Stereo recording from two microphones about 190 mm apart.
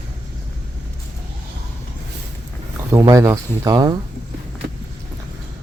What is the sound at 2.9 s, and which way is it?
Speech, 15° right (ahead or behind).